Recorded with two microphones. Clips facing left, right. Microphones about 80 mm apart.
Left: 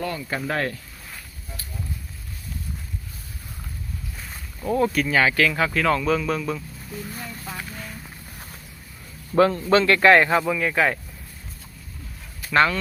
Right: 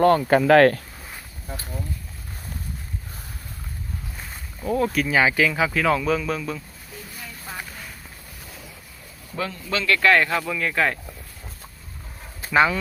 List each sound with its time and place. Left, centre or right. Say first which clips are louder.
0.0 s speech: right 12 dB; right
4.3 s speech: even; centre
9.3 s speech: left 10 dB; left; by 10.9 s centre
12.5 s speech: right 1 dB; centre